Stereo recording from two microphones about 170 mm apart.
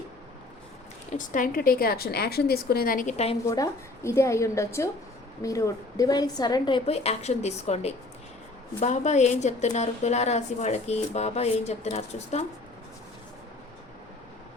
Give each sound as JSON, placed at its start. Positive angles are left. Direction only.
{"t": 1.1, "sound": "a woman's voice", "side_deg": 50}
{"t": 3.4, "sound": "a woman's voice", "side_deg": 20}